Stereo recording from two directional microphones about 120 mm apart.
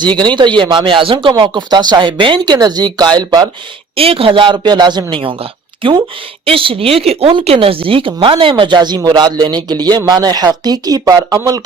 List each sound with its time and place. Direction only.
0.0 s speech: 40° right (ahead or behind)
3.9 s a woman's voice: 50° right (ahead or behind); by 11.6 s 30° right (ahead or behind)